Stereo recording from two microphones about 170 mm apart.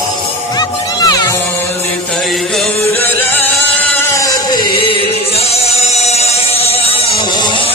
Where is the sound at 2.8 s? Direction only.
15° left (ahead or behind).